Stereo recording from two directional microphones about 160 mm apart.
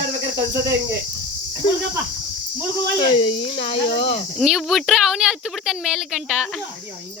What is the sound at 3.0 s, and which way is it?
Speech, 30° left (ahead or behind).